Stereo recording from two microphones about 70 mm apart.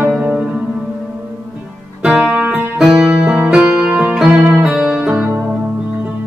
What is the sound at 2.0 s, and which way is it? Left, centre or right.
Music, centre.